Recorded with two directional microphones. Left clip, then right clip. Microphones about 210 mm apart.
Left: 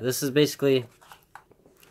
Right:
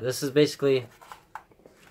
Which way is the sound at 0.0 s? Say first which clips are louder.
Even; 40° left (ahead or behind).